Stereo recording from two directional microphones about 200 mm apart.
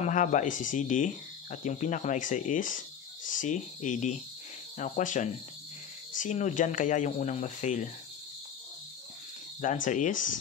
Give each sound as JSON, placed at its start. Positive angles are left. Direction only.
{"t": 0.0, "sound": "speech", "side_deg": 40}
{"t": 9.6, "sound": "speech", "side_deg": 40}